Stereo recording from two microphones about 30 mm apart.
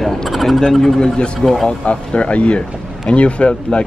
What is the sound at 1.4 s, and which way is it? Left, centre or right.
Speech, centre.